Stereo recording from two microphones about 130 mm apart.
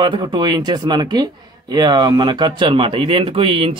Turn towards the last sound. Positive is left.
turn(degrees=-45)  # may be behind; listen again after turning